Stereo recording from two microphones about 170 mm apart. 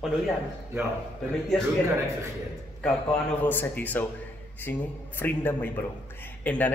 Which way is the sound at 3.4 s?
10° left (ahead or behind).